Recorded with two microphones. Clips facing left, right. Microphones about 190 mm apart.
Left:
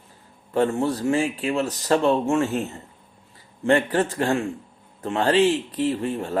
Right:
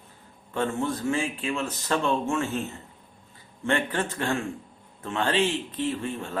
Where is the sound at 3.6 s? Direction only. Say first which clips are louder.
Left 7 dB; 35° left (ahead or behind).